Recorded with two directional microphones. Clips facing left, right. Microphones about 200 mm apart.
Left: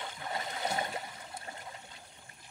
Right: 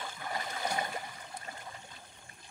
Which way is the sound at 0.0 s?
25° left (ahead or behind).